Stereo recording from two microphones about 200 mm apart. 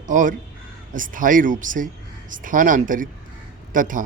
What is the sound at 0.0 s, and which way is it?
A man's voice, 40° right (ahead or behind).